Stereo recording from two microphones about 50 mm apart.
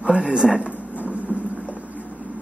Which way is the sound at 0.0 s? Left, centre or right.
Right.